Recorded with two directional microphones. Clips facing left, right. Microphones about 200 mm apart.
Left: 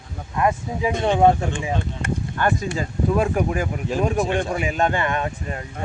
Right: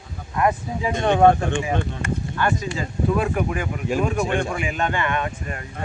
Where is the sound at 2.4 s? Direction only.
40° left (ahead or behind).